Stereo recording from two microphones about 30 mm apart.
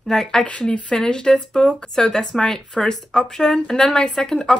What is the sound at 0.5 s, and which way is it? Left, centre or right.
Speech, left.